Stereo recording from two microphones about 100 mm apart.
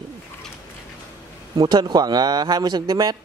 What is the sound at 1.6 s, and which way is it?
Speech, 45° right (ahead or behind).